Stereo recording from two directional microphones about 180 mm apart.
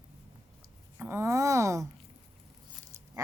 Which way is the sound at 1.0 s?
15° right (ahead or behind).